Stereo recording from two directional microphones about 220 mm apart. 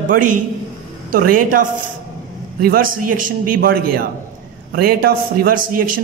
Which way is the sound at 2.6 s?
40° right (ahead or behind).